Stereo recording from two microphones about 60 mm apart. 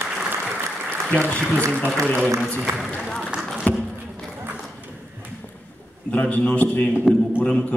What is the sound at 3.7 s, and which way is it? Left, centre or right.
Speech, left.